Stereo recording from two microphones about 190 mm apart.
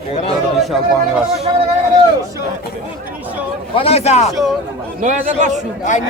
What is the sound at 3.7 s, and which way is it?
Speech, 30° left (ahead or behind).